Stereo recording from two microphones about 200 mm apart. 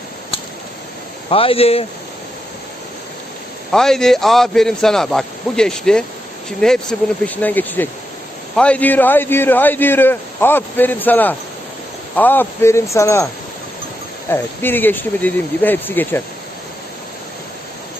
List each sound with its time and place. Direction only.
1.3 s a man's voice: 25° left (ahead or behind)
3.7 s a man's voice: centre (ahead or behind)
14.3 s speech: 10° left (ahead or behind)